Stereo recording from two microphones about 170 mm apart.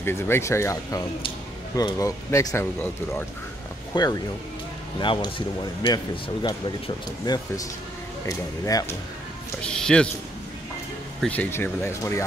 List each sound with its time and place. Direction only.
0.0 s speech: 15° left (ahead or behind)
3.9 s speech: 20° left (ahead or behind)
9.6 s speech: 5° left (ahead or behind)
11.1 s speech: 10° left (ahead or behind)